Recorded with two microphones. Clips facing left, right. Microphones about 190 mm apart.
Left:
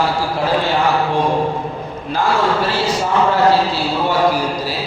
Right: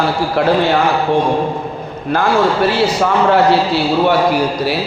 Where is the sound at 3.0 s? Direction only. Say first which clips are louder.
Right 2 dB; 65° right (ahead or behind).